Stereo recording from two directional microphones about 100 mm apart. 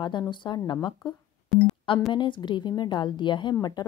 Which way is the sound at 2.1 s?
55° left (ahead or behind).